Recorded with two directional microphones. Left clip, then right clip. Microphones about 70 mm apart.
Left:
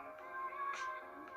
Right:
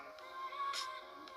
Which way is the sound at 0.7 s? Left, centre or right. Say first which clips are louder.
Even; left.